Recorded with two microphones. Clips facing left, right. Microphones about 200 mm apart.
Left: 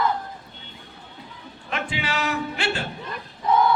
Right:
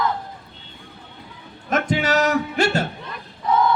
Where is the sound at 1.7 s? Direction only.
40° right (ahead or behind).